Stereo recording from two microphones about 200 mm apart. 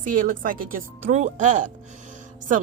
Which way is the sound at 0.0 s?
45° right (ahead or behind).